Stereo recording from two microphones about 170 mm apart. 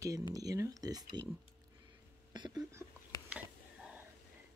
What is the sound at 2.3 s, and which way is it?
Speech, 25° right (ahead or behind).